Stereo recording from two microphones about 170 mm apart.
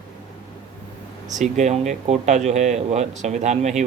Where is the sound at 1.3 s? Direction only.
45° right (ahead or behind).